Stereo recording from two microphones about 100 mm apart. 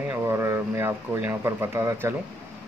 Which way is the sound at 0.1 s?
25° right (ahead or behind).